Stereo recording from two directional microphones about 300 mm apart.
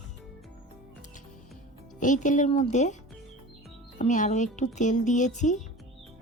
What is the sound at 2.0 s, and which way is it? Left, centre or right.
Speech, left.